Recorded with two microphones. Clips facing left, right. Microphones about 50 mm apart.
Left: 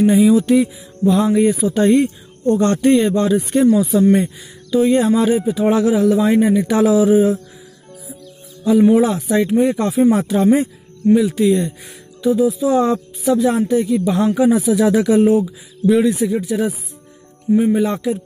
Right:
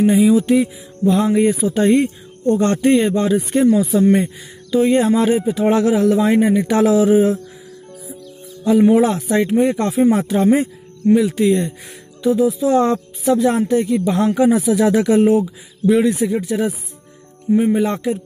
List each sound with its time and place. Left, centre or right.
0.0 s speech: centre
1.0 s speech: right
5.5 s speech: right
8.6 s speech: right
11.1 s speech: right
17.6 s speech: right